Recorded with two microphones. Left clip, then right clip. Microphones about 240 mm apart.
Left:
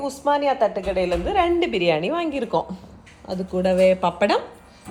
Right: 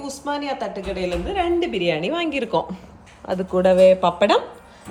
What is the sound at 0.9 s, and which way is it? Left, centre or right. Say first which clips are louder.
Speech: even; left.